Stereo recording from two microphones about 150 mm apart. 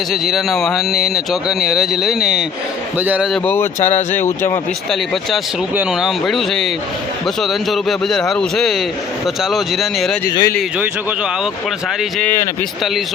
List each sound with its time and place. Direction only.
0.1 s a man's voice: centre (ahead or behind)
3.3 s speech: 15° left (ahead or behind)
3.8 s speech: 55° left (ahead or behind)
4.1 s speech: 15° left (ahead or behind)
5.7 s speech: 5° right (ahead or behind)
10.2 s speech: 25° left (ahead or behind)
12.2 s speech: 15° left (ahead or behind)